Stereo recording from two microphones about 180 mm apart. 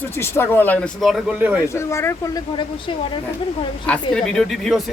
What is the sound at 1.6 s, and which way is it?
Speech, 15° left (ahead or behind).